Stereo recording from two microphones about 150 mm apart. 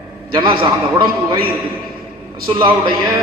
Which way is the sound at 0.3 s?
30° right (ahead or behind).